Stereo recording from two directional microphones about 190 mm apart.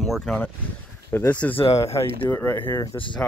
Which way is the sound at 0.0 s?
Centre (ahead or behind).